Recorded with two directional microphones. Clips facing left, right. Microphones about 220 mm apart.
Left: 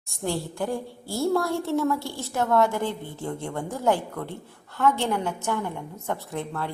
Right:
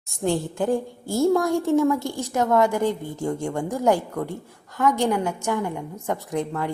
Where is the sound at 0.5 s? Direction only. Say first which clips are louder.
Right 6 dB; 20° right (ahead or behind).